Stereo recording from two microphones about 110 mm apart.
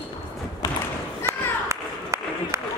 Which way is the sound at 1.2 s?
25° right (ahead or behind).